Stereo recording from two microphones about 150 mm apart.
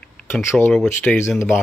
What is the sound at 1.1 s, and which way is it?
Speech, 15° left (ahead or behind).